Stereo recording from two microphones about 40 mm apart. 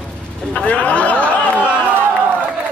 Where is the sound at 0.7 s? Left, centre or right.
Left.